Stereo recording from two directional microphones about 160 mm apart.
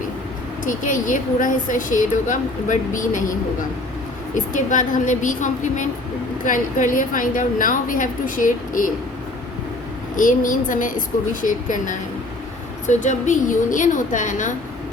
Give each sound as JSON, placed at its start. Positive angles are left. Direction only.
{"t": 0.6, "sound": "a woman's voice", "side_deg": 55}
{"t": 4.4, "sound": "a woman's voice", "side_deg": 50}
{"t": 10.2, "sound": "a woman's voice", "side_deg": 55}